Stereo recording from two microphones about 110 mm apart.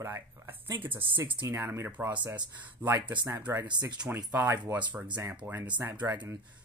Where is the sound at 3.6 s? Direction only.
40° right (ahead or behind).